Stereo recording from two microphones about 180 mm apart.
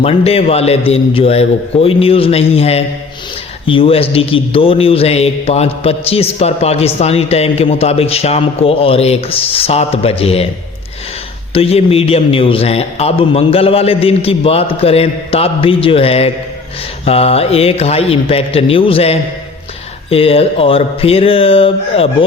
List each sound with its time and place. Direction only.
0.0 s a man's voice: 35° left (ahead or behind)
11.5 s a man's voice: 35° left (ahead or behind)